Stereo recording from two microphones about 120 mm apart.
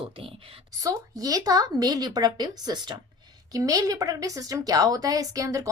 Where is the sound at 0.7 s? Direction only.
30° right (ahead or behind).